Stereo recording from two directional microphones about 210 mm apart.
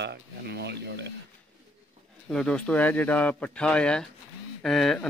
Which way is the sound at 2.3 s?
5° left (ahead or behind).